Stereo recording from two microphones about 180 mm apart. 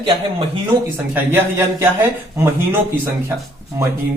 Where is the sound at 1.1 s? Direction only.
10° right (ahead or behind).